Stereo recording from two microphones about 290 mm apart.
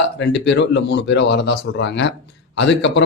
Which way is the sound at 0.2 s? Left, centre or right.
Left.